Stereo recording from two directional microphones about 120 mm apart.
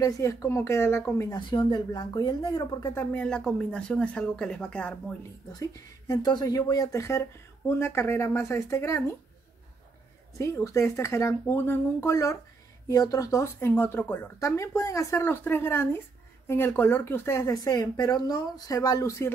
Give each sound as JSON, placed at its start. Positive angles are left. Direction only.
{"t": 0.0, "sound": "speech", "side_deg": 25}
{"t": 1.5, "sound": "speech", "side_deg": 40}
{"t": 5.5, "sound": "speech", "side_deg": 30}
{"t": 10.3, "sound": "speech", "side_deg": 25}
{"t": 14.4, "sound": "speech", "side_deg": 25}